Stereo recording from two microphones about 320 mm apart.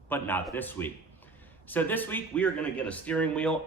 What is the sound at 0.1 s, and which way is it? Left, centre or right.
Speech, centre.